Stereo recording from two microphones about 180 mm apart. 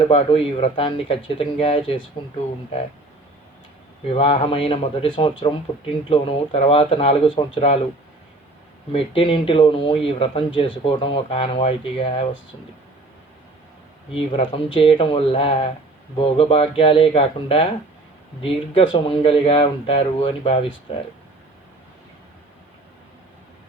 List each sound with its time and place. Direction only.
0.1 s speech: 30° left (ahead or behind)
4.1 s speech: 30° left (ahead or behind)
8.9 s speech: 30° left (ahead or behind)
14.1 s speech: 30° left (ahead or behind)
18.7 s speech: 30° left (ahead or behind)